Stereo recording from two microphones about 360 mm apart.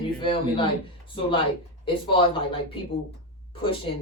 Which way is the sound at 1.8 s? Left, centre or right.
Centre.